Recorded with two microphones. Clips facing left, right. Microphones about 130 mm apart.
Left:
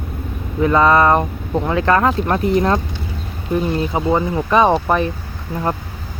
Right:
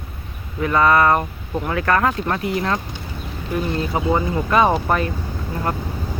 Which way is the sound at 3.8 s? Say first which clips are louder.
Left 3 dB; 20° left (ahead or behind).